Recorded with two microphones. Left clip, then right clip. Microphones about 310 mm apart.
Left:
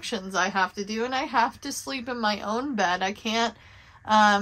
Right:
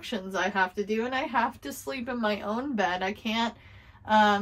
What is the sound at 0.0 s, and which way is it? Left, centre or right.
A woman's voice, centre.